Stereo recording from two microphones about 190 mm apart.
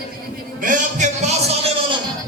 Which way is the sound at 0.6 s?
40° right (ahead or behind).